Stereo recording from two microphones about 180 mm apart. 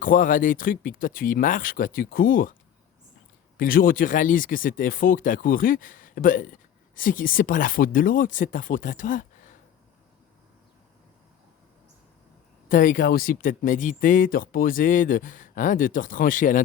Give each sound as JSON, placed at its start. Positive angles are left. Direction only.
{"t": 0.0, "sound": "speech", "side_deg": 45}
{"t": 3.6, "sound": "speech", "side_deg": 50}
{"t": 12.6, "sound": "speech", "side_deg": 50}